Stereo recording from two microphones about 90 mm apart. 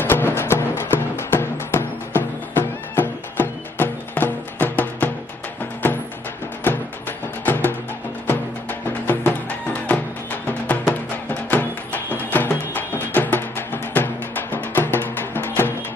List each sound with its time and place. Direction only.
0.0 s music: 25° left (ahead or behind)
7.4 s music: 20° left (ahead or behind)